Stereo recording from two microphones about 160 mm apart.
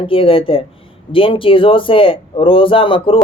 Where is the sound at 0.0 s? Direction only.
35° left (ahead or behind).